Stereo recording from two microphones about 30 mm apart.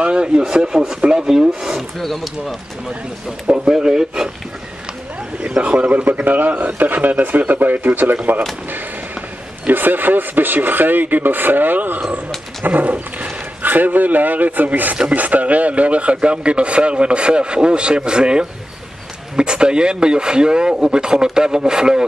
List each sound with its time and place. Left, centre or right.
0.5 s speech: right
2.0 s speech: centre
3.4 s a man's voice: right
3.7 s speech: right
5.6 s a man's voice: right
6.2 s speech: right
9.7 s speech: right
12.6 s dog: right
13.6 s a man's voice: right